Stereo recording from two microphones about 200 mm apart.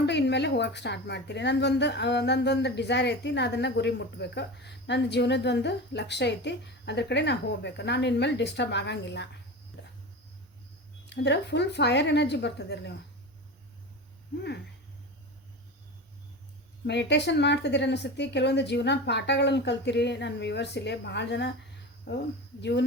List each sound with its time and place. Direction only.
0.0 s speech: 60° left (ahead or behind)
9.8 s cricket: 60° left (ahead or behind)
11.0 s speech: 60° left (ahead or behind)
16.8 s speech: 60° left (ahead or behind)